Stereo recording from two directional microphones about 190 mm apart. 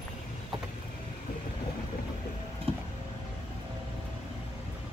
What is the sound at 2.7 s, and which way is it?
Vehicle, 30° right (ahead or behind).